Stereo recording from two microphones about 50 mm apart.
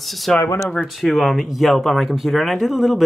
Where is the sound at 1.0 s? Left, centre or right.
Centre.